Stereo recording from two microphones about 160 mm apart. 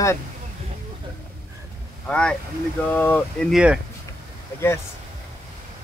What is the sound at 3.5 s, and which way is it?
Speech, 5° right (ahead or behind).